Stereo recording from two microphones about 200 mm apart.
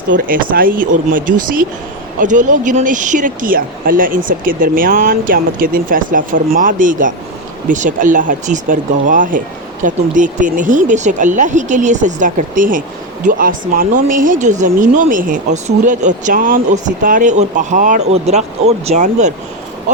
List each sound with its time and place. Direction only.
0.3 s speech: 45° right (ahead or behind)